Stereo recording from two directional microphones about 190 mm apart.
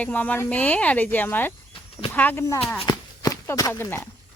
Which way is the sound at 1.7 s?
30° left (ahead or behind).